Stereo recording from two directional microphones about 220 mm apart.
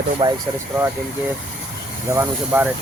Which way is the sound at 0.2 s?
25° right (ahead or behind).